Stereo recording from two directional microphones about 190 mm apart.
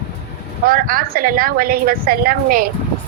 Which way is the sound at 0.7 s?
50° right (ahead or behind).